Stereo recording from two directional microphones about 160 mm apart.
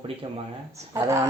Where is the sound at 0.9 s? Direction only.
20° right (ahead or behind).